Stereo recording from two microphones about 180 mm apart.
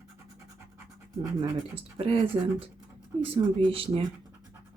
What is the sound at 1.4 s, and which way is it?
Speech, 30° right (ahead or behind).